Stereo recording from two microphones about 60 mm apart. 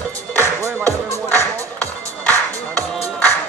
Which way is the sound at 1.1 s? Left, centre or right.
Left.